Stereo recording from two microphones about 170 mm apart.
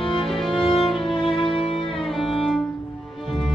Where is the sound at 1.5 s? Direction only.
35° left (ahead or behind).